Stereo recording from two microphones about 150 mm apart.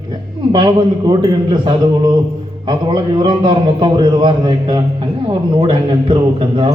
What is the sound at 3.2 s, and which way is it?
A man's voice, 30° right (ahead or behind).